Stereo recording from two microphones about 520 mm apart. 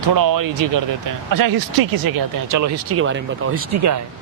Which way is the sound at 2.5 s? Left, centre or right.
Right.